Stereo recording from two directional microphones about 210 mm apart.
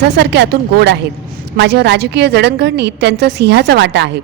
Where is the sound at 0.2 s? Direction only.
55° right (ahead or behind).